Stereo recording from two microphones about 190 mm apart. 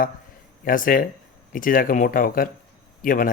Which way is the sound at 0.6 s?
45° left (ahead or behind).